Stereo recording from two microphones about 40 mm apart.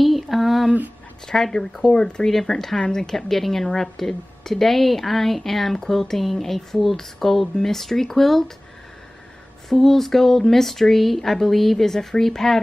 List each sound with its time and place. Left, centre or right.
0.0 s a sound: centre
1.2 s a woman's voice: centre
2.2 s a woman's voice: centre
9.7 s a woman's voice: centre